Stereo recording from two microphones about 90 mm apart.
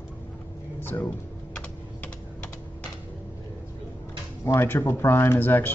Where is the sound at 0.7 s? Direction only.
20° left (ahead or behind).